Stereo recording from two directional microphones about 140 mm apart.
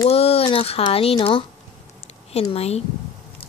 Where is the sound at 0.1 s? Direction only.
45° left (ahead or behind).